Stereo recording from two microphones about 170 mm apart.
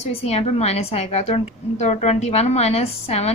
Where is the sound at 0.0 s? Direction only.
40° left (ahead or behind).